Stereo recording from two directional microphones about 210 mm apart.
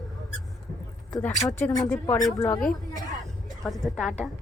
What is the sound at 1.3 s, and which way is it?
Speech, 35° left (ahead or behind).